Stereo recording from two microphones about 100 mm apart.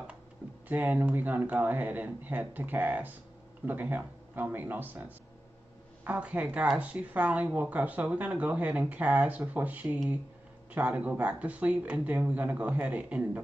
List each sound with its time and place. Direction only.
0.7 s speech: 15° right (ahead or behind)